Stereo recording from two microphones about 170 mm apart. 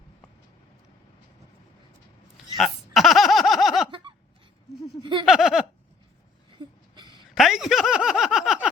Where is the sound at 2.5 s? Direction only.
Centre (ahead or behind).